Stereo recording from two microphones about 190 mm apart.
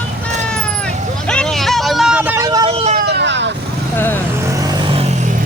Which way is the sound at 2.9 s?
65° right (ahead or behind).